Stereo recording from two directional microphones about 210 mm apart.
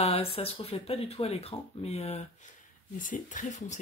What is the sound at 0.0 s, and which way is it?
Speech, 30° left (ahead or behind).